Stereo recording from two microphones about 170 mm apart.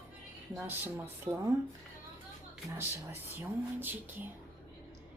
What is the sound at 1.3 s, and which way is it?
Speech, 30° right (ahead or behind).